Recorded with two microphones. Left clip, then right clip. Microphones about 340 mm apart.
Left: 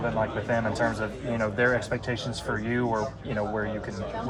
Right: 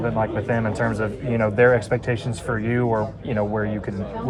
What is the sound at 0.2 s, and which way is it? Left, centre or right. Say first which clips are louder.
Speech: right 4 dB; right.